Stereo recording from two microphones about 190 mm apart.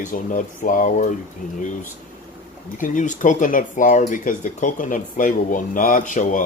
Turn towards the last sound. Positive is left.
turn(degrees=45)  # may be behind; listen again after turning